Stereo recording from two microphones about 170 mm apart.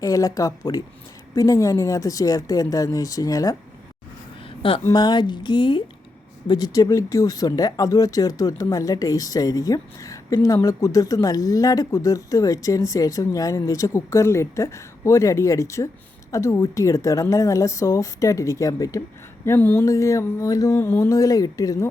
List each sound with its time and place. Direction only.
0.0 s speech: 20° left (ahead or behind)
4.8 s speech: 20° left (ahead or behind)